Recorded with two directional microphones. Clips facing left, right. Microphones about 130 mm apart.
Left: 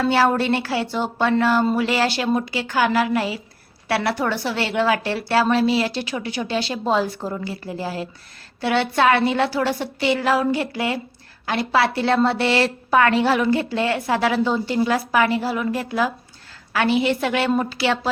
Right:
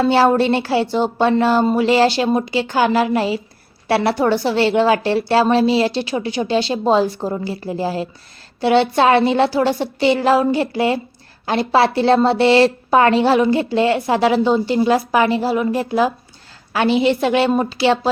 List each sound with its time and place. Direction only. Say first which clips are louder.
0.0 s a woman's voice: right 4 dB; 25° right (ahead or behind)